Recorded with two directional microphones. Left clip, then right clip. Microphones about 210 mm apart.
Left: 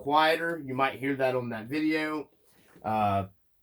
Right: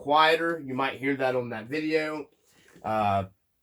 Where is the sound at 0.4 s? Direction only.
20° right (ahead or behind).